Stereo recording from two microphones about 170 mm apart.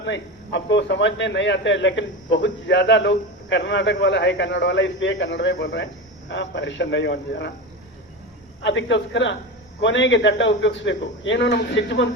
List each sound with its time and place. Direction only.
0.0 s a man's voice: 90° left
8.6 s a man's voice: 90° left